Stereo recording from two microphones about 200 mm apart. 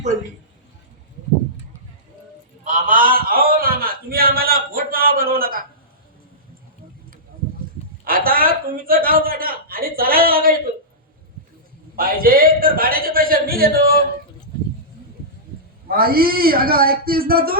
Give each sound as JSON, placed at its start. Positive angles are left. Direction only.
{"t": 2.6, "sound": "a man's voice", "side_deg": -40}
{"t": 8.0, "sound": "a man's voice", "side_deg": -45}
{"t": 11.9, "sound": "a man's voice", "side_deg": -45}
{"t": 15.9, "sound": "a man's voice", "side_deg": -50}